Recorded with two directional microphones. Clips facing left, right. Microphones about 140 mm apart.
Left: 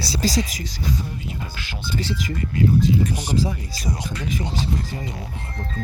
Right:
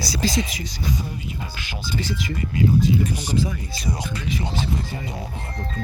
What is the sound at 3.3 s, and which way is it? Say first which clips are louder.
Speech: left 1 dB; 35° left (ahead or behind).